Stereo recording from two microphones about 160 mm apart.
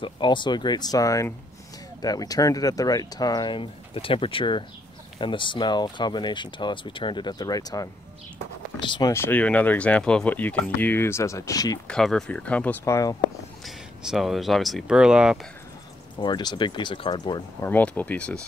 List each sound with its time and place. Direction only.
0.0 s speech: 30° left (ahead or behind)
9.1 s speech: 15° left (ahead or behind)
11.9 s speech: 5° left (ahead or behind)
12.8 s speech: 20° left (ahead or behind)
13.7 s speech: centre (ahead or behind)
16.2 s speech: 30° left (ahead or behind)
17.6 s speech: 10° left (ahead or behind)